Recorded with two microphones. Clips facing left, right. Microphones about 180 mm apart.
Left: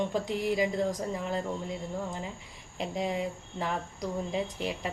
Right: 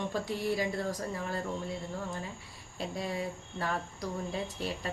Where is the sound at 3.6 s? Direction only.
15° left (ahead or behind).